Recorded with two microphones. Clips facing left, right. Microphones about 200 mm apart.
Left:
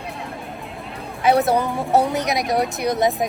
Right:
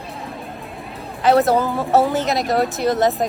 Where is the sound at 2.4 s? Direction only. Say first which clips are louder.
Right 2 dB; centre (ahead or behind).